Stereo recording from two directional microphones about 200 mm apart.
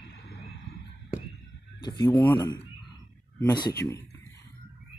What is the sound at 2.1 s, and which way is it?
Speech, 10° left (ahead or behind).